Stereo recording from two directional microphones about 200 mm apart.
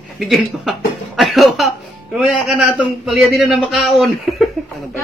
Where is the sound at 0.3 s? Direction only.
Centre (ahead or behind).